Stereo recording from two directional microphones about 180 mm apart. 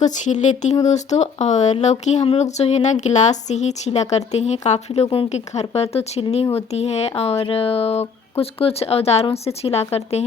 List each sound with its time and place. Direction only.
0.0 s speech: 40° left (ahead or behind)